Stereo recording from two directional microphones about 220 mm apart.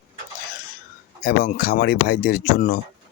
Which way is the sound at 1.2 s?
45° left (ahead or behind).